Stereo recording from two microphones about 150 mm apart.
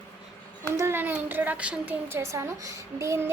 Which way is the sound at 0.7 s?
15° right (ahead or behind).